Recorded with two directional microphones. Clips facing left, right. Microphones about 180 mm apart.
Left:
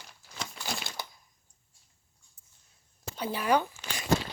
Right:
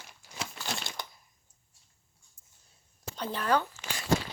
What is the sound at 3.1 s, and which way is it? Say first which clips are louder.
Speech: left 2 dB; 10° left (ahead or behind).